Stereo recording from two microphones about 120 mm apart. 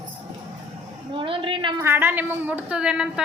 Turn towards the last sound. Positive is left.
turn(degrees=-5)  # may be behind; listen again after turning